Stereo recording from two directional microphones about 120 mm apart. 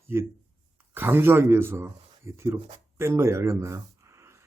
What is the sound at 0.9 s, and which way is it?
A man's voice, 20° right (ahead or behind).